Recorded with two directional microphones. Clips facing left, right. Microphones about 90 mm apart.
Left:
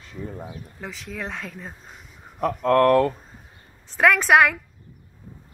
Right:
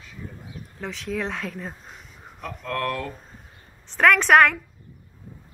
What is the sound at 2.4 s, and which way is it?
Speech, 50° left (ahead or behind).